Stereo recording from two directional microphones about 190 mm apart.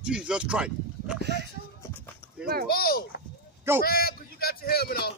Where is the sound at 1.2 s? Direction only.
65° right (ahead or behind).